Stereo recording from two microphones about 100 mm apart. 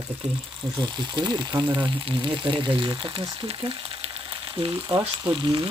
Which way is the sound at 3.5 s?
60° right (ahead or behind).